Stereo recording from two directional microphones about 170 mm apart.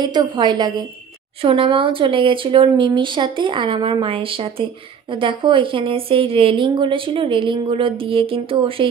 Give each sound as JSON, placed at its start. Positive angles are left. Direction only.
{"t": 0.0, "sound": "a woman's voice", "side_deg": -25}